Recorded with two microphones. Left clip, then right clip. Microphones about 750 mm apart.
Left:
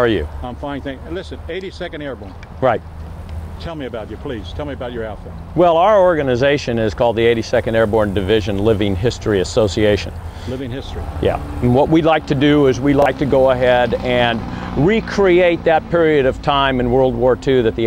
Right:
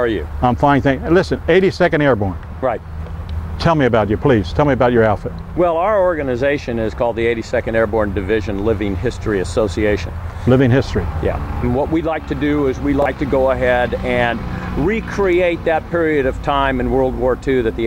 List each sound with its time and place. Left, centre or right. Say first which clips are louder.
0.4 s speech: right 13 dB; right
2.6 s speech: left 3 dB; left
3.6 s speech: right 13 dB; right
5.6 s speech: left 3 dB; left
10.5 s speech: right 13 dB; right
11.2 s speech: left 7 dB; left